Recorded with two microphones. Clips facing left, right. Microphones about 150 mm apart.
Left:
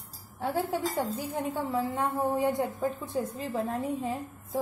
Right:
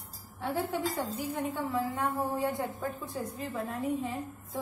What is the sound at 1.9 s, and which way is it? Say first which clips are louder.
A woman's voice: left 3 dB; 20° left (ahead or behind).